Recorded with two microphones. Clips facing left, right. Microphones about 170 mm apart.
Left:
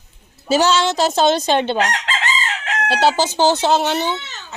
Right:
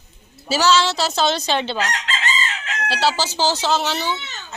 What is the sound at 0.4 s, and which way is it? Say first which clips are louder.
Chicken: left 2 dB; 50° left (ahead or behind).